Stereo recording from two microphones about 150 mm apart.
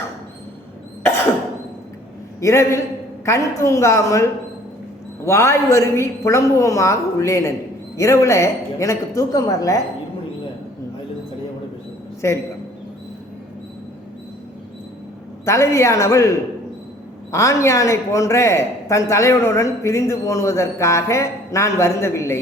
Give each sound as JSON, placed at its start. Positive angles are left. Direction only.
{"t": 2.4, "sound": "speech", "side_deg": 20}
{"t": 12.2, "sound": "speech", "side_deg": 20}
{"t": 15.4, "sound": "speech", "side_deg": 20}